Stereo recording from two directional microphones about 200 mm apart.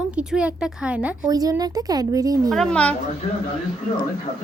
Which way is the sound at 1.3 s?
20° right (ahead or behind).